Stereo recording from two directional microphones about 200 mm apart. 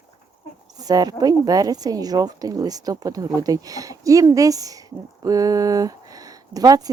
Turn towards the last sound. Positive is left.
turn(degrees=-20)  # may be behind; listen again after turning